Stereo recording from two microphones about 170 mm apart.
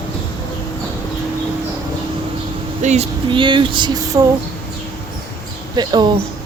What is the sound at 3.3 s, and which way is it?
Speech, 30° right (ahead or behind).